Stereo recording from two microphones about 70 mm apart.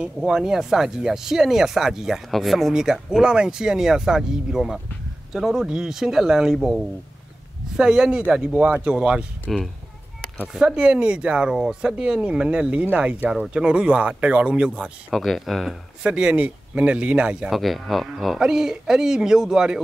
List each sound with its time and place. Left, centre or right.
0.2 s speech: centre
7.7 s speech: centre
9.5 s speech: centre
10.5 s speech: centre
15.1 s speech: centre
16.0 s speech: centre
17.5 s speech: centre